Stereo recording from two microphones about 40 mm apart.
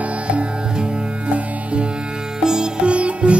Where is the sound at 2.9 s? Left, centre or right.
Right.